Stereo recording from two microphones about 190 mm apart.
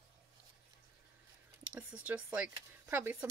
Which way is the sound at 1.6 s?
5° right (ahead or behind).